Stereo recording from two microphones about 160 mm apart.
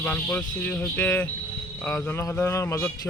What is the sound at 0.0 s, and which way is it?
Speech, 10° left (ahead or behind).